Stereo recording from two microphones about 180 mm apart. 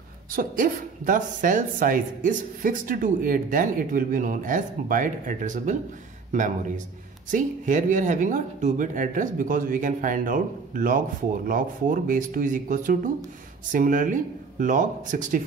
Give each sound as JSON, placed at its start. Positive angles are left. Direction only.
{"t": 0.3, "sound": "speech", "side_deg": -50}